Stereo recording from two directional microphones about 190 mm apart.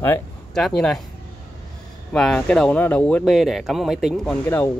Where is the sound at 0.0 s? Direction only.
5° left (ahead or behind).